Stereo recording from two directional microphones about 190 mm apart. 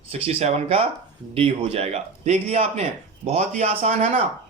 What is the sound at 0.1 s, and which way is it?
A man's voice, 30° right (ahead or behind).